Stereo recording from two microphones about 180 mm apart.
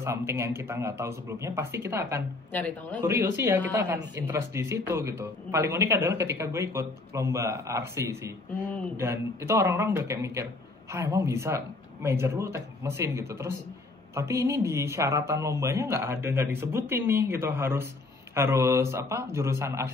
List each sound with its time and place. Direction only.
0.0 s a man's voice: 15° right (ahead or behind)
2.5 s a man's voice: 10° left (ahead or behind)
3.1 s a man's voice: 15° right (ahead or behind)